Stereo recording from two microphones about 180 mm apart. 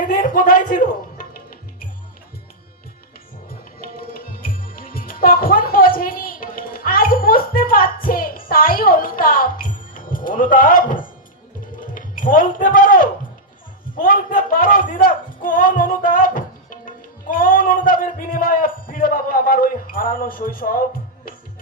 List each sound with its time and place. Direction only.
0.1 s music: 50° left (ahead or behind)
3.8 s music: 55° left (ahead or behind)
11.9 s a man's voice: 50° left (ahead or behind)